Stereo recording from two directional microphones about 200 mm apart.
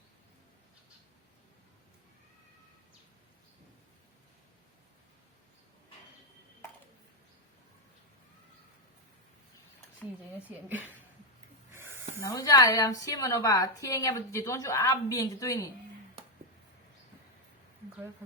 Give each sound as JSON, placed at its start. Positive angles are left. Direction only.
{"t": 10.5, "sound": "speech", "side_deg": -10}
{"t": 11.7, "sound": "snake", "side_deg": -10}
{"t": 12.3, "sound": "a woman's voice", "side_deg": 20}